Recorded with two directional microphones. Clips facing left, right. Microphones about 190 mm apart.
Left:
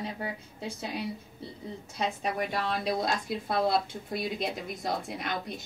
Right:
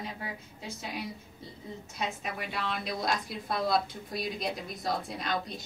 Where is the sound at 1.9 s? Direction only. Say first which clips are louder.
Left 5 dB; 40° left (ahead or behind).